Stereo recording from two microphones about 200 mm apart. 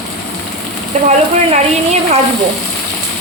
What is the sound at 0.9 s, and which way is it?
Speech, 35° right (ahead or behind).